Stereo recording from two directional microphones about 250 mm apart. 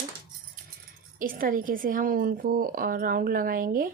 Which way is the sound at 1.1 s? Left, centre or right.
Right.